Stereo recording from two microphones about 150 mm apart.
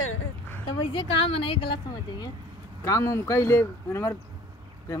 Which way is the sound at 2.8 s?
20° left (ahead or behind).